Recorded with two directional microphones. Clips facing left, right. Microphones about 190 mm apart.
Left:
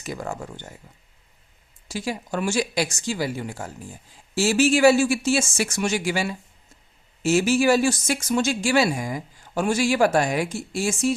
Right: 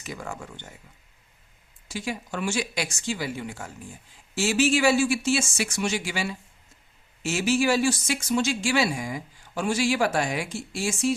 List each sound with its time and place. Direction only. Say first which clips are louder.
0.0 s speech: left 5 dB; 40° left (ahead or behind)
1.9 s speech: left 4 dB; 35° left (ahead or behind)